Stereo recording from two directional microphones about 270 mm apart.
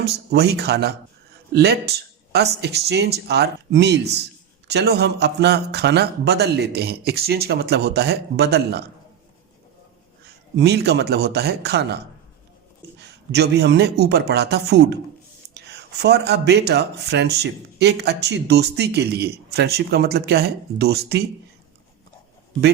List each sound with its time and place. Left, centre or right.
0.0 s speech: right
10.6 s speech: right